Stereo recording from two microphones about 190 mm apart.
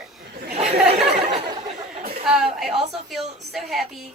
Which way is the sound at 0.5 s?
35° right (ahead or behind).